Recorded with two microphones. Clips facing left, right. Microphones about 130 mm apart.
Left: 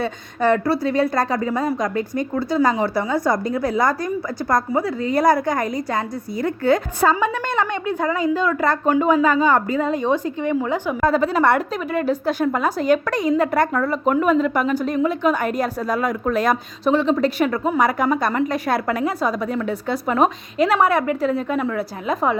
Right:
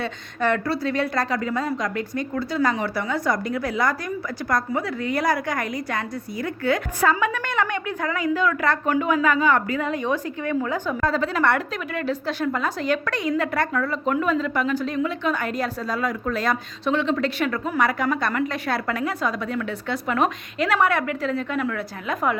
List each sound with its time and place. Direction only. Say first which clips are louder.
0.0 s speech: left 4 dB; 15° left (ahead or behind)
3.2 s a woman's voice: left 4 dB; 35° left (ahead or behind)
5.2 s a woman's voice: left 8 dB; 40° left (ahead or behind)
7.0 s a woman's voice: left 3 dB; 30° left (ahead or behind)
11.0 s a woman's voice: left 5 dB; 45° left (ahead or behind); by 22.4 s 30° left (ahead or behind)